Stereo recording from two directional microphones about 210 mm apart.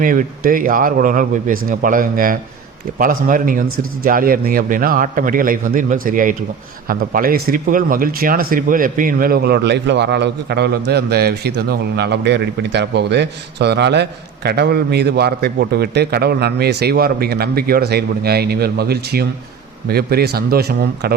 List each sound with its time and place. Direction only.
0.0 s speech: 40° right (ahead or behind)